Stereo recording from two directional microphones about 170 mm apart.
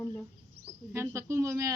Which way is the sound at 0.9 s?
15° right (ahead or behind).